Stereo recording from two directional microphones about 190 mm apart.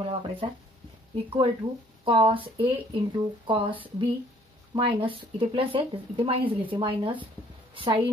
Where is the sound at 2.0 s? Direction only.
25° right (ahead or behind).